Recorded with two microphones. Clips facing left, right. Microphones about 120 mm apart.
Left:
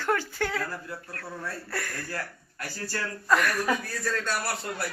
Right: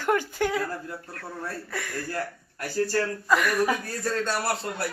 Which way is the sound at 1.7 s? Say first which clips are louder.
Right 1 dB; centre (ahead or behind).